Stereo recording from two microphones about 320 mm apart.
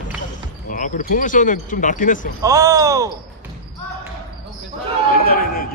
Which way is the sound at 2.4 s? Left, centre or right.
Centre.